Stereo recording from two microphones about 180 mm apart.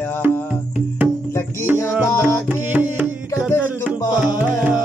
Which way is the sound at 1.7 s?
10° right (ahead or behind).